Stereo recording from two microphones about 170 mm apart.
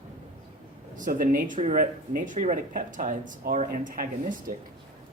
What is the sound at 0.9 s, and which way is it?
Speech, 50° right (ahead or behind).